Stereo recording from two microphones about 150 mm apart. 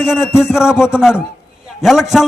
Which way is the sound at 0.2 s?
15° left (ahead or behind).